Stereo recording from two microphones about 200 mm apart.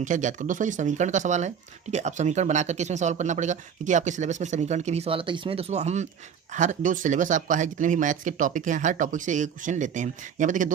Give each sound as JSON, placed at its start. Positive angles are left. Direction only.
{"t": 0.0, "sound": "speech", "side_deg": -40}